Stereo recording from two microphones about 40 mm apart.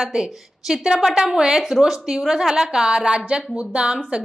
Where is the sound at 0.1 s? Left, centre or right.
Centre.